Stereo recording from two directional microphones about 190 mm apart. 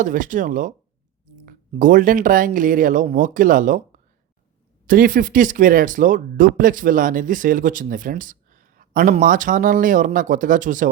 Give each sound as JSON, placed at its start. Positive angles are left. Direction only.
{"t": 0.0, "sound": "speech", "side_deg": -45}